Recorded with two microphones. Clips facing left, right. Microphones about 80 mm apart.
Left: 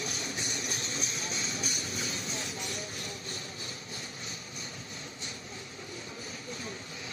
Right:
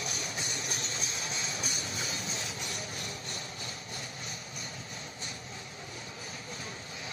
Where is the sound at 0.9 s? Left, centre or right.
Right.